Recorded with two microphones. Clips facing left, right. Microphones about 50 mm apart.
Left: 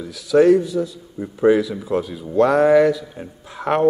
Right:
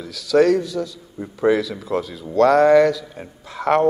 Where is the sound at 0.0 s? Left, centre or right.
Centre.